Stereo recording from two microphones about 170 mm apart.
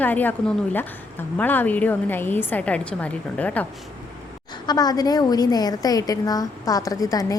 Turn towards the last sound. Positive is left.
turn(degrees=20)  # may be behind; listen again after turning